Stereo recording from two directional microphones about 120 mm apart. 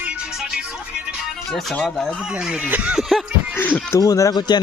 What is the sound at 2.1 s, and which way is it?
Speech, 5° right (ahead or behind).